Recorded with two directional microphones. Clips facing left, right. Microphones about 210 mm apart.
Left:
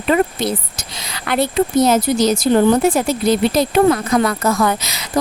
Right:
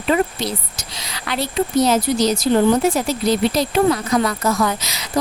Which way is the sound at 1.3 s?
50° left (ahead or behind).